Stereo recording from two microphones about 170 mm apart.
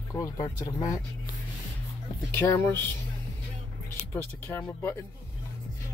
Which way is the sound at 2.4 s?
10° left (ahead or behind).